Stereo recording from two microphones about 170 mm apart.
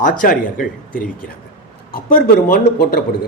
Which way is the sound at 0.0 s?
55° left (ahead or behind).